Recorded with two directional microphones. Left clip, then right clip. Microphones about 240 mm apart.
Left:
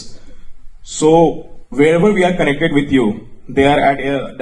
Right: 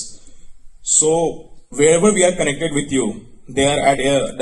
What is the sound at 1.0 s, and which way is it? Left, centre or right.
A man's voice, right.